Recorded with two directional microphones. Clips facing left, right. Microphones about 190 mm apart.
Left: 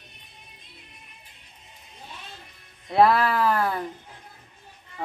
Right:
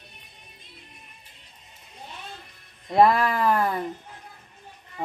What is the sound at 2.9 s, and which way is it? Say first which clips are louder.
Speech: even; 15° right (ahead or behind).